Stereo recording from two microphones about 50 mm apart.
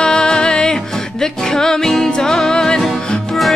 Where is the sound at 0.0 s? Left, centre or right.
Centre.